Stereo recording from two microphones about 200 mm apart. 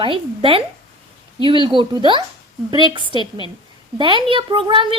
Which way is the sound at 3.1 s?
25° left (ahead or behind).